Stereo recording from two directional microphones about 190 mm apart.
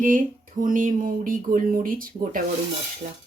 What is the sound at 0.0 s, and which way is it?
Speech, 45° right (ahead or behind).